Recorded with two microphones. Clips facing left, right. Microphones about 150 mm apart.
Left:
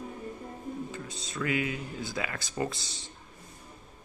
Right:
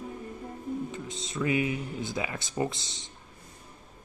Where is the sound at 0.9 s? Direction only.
20° right (ahead or behind).